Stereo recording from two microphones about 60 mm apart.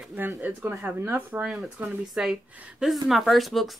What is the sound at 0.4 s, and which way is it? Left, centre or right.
Speech, right.